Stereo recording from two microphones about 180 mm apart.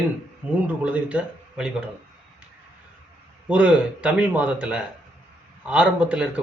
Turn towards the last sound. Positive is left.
turn(degrees=-5)  # may be behind; listen again after turning